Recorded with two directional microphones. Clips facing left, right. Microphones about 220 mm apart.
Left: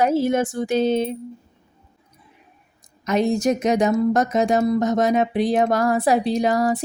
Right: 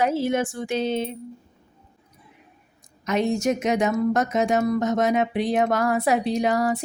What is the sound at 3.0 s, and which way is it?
Speech, 35° left (ahead or behind).